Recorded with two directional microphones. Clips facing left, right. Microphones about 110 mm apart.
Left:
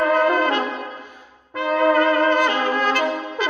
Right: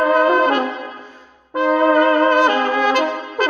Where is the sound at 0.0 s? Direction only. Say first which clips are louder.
Right 3 dB; 15° right (ahead or behind).